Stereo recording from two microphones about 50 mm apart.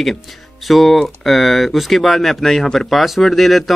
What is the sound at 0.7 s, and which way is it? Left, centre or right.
Speech, centre.